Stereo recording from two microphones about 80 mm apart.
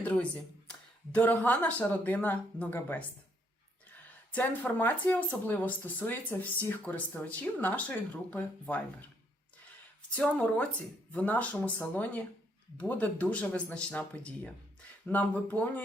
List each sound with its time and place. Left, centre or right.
0.0 s speech: centre
0.7 s a sound: left
1.5 s speech: centre
4.3 s speech: left
10.2 s speech: centre